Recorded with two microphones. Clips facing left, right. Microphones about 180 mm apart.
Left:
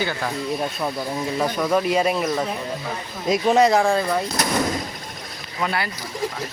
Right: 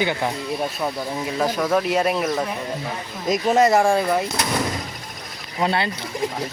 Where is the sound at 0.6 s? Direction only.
5° right (ahead or behind).